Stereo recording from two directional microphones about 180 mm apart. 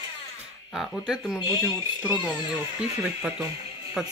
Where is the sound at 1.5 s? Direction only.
20° left (ahead or behind).